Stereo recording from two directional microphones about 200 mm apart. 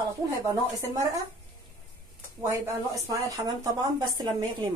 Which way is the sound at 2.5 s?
15° right (ahead or behind).